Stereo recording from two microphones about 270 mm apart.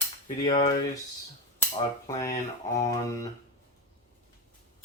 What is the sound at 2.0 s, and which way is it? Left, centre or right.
Speech, centre.